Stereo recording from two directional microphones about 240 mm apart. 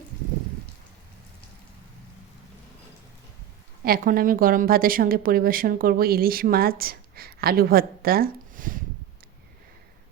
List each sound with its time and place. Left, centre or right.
3.8 s a woman's voice: right